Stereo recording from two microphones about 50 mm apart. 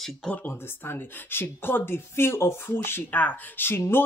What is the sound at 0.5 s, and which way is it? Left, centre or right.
A woman's voice, left.